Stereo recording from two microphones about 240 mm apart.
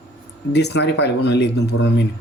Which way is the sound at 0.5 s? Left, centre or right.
Left.